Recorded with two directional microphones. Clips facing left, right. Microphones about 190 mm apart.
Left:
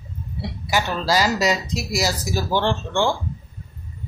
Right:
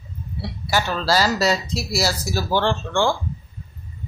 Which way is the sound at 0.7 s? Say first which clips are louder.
Even; 15° left (ahead or behind).